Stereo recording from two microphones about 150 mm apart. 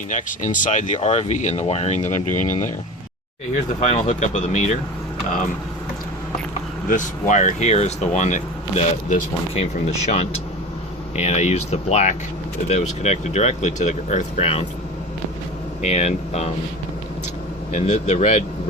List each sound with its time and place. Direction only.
0.1 s speech: 60° left (ahead or behind)
0.9 s speech: 40° left (ahead or behind); by 2.7 s 60° left (ahead or behind)
3.8 s speech: 45° left (ahead or behind)
6.8 s speech: 55° left (ahead or behind)
15.8 s speech: 45° left (ahead or behind)
17.7 s speech: 50° left (ahead or behind)